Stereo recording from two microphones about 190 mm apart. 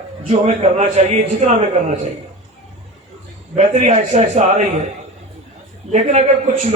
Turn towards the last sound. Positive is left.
turn(degrees=-35)  # may be behind; listen again after turning